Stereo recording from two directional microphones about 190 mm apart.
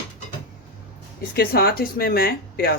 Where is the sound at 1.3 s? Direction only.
55° left (ahead or behind).